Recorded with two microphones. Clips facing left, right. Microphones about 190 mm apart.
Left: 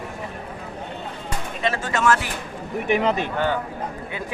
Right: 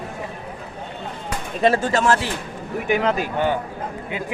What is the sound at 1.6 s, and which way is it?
Speech, 35° right (ahead or behind).